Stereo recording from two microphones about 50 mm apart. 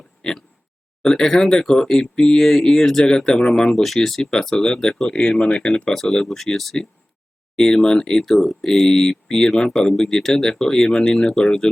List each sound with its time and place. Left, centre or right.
0.2 s a sound: centre
1.0 s speech: centre
5.1 s speech: left